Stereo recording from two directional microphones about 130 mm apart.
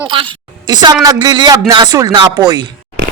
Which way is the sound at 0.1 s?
40° right (ahead or behind).